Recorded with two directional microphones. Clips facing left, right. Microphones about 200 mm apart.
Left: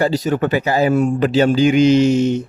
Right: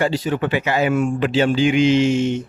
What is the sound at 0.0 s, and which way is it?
Speech, 40° left (ahead or behind).